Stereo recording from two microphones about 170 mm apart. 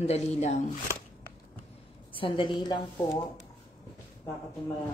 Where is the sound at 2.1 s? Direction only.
30° left (ahead or behind).